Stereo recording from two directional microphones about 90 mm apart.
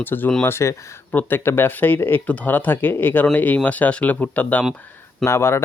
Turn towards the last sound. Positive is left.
turn(degrees=30)  # may be behind; listen again after turning